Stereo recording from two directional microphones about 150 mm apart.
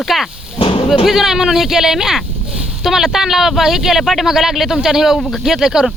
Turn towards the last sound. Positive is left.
turn(degrees=-5)  # may be behind; listen again after turning